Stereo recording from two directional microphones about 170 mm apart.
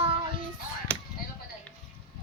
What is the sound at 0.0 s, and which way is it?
Child singing, 35° right (ahead or behind).